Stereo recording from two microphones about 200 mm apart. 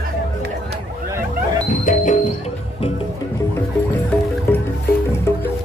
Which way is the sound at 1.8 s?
40° left (ahead or behind).